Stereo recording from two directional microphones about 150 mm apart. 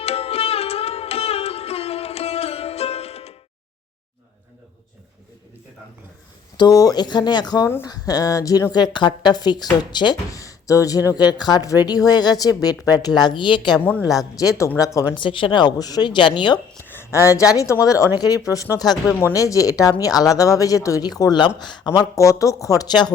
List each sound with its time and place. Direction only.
0.0 s sitar: 40° left (ahead or behind)
6.6 s speech: 25° left (ahead or behind)
15.1 s speech: 35° left (ahead or behind)
16.9 s speech: 15° left (ahead or behind)